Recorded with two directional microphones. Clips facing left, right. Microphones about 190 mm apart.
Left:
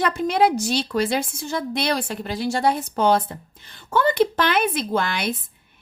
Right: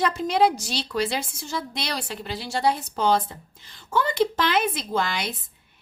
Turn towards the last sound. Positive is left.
turn(degrees=55)  # may be behind; listen again after turning